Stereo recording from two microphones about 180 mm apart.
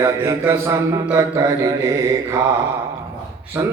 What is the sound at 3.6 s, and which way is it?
Speech, 10° right (ahead or behind).